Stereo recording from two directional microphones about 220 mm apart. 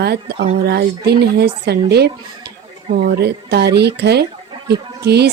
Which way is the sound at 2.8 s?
45° right (ahead or behind).